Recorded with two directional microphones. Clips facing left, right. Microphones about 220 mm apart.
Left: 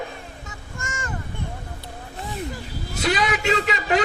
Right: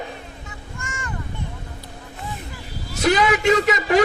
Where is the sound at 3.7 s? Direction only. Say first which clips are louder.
Right 3 dB; 90° right.